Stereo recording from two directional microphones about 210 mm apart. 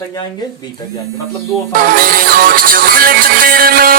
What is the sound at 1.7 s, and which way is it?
Music, 45° right (ahead or behind).